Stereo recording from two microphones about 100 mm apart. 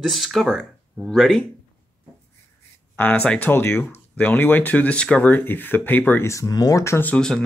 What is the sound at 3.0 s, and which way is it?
Speech, 15° left (ahead or behind).